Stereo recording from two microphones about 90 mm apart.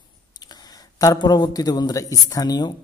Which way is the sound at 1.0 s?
50° left (ahead or behind).